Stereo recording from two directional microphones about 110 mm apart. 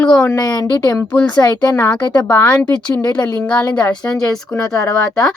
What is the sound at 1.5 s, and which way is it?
A woman's voice, 20° left (ahead or behind).